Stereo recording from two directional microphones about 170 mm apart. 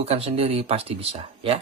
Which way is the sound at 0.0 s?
35° right (ahead or behind).